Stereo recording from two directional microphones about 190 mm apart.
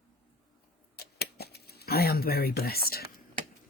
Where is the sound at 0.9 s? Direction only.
55° left (ahead or behind).